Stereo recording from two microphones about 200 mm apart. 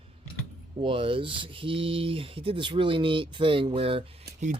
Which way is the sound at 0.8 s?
25° right (ahead or behind).